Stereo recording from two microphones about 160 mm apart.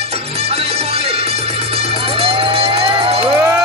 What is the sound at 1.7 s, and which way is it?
Crowd, 35° right (ahead or behind).